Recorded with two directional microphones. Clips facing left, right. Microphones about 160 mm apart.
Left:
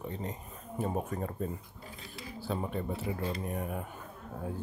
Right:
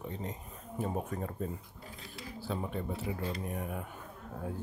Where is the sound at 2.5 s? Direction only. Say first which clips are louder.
Left 2 dB; 45° left (ahead or behind).